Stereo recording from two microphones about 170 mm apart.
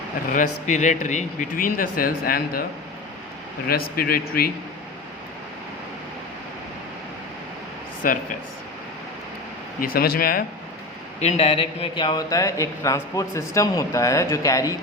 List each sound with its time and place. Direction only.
0.3 s speech: 45° left (ahead or behind)
3.7 s speech: 60° left (ahead or behind)
8.0 s speech: 55° left (ahead or behind)
9.8 s speech: 60° left (ahead or behind)
11.2 s a man's voice: 40° left (ahead or behind); by 14.8 s 20° left (ahead or behind)